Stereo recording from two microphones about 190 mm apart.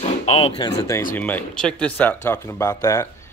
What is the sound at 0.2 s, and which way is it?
Speech, 30° left (ahead or behind).